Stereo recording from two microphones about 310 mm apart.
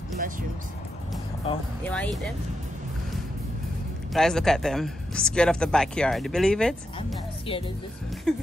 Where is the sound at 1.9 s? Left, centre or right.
Centre.